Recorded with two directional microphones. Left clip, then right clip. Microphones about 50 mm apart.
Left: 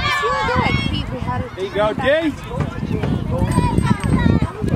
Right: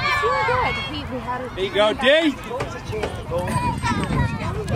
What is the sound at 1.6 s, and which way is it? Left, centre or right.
Speech, right.